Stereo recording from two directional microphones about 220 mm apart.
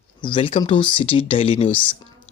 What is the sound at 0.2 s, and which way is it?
Speech, 20° left (ahead or behind).